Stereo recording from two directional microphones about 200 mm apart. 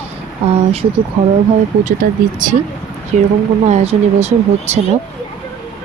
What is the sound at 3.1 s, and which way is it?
Speech, 35° right (ahead or behind).